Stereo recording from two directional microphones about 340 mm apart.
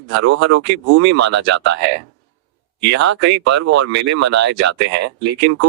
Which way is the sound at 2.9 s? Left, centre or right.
Right.